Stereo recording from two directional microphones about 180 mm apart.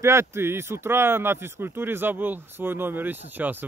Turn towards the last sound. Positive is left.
turn(degrees=-10)  # may be behind; listen again after turning